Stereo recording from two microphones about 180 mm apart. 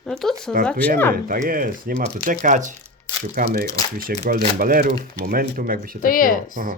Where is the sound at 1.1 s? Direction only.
50° right (ahead or behind).